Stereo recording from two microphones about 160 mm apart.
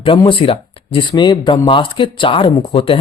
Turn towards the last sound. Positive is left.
turn(degrees=35)  # may be behind; listen again after turning